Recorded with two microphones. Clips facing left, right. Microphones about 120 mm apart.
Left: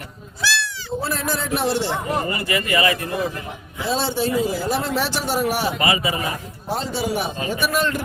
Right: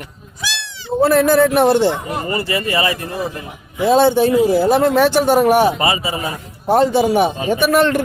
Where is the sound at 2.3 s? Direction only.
30° right (ahead or behind).